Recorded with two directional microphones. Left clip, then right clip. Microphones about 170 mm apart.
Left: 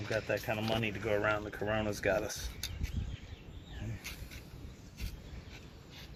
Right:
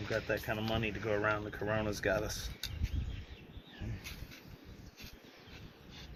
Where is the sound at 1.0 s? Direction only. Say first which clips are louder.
Left 1 dB; 30° left (ahead or behind).